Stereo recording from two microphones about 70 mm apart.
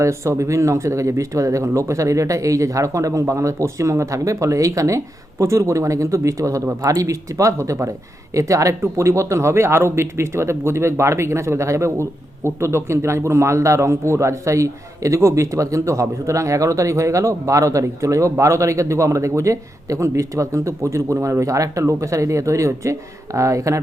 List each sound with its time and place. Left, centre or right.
0.0 s speech: right